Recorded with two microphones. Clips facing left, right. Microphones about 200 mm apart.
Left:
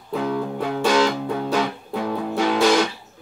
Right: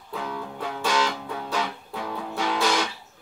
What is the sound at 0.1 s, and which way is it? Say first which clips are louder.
Music: left 9 dB; 45° left (ahead or behind).